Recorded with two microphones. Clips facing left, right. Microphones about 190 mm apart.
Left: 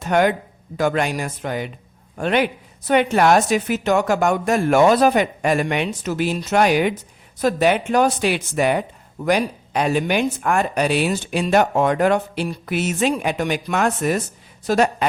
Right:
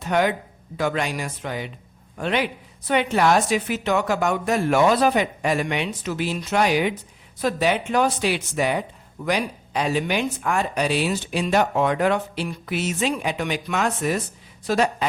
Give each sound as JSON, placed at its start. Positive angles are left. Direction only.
{"t": 0.0, "sound": "a woman's voice", "side_deg": 50}